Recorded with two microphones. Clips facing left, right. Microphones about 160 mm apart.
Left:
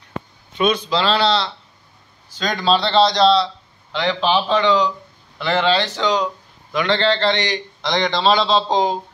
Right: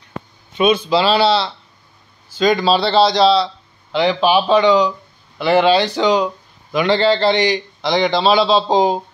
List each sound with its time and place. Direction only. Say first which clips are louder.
0.6 s a man's voice: right 4 dB; 5° right (ahead or behind)